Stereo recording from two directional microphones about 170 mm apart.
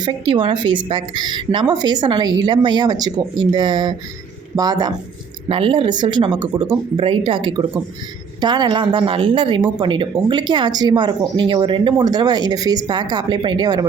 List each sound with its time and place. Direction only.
0.0 s a woman's voice: 30° right (ahead or behind)